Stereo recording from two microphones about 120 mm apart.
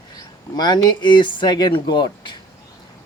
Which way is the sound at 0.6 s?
40° left (ahead or behind).